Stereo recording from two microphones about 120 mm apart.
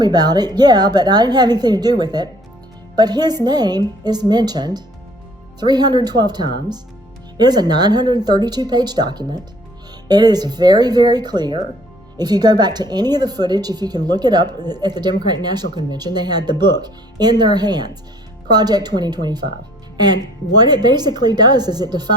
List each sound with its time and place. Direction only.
0.0 s speech: 35° right (ahead or behind)
20.6 s speech: 35° right (ahead or behind)